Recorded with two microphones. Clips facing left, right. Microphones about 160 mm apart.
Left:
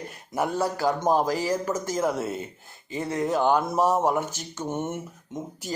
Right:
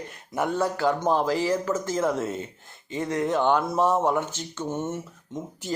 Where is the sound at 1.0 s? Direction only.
10° left (ahead or behind).